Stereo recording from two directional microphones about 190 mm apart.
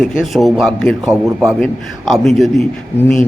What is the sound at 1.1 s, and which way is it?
Speech, 10° right (ahead or behind).